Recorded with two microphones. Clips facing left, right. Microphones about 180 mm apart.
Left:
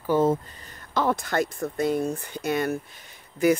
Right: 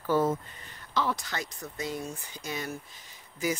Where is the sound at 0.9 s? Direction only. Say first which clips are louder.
Left 7 dB; 50° left (ahead or behind).